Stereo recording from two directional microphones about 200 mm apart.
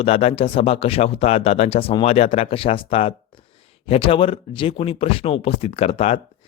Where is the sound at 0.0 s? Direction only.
30° left (ahead or behind).